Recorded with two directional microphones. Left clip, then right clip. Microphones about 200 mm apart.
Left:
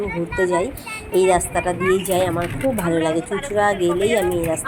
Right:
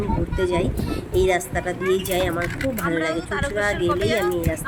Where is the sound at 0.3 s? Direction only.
Centre (ahead or behind).